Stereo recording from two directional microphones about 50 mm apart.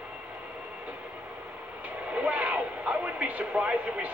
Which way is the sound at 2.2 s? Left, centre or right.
Right.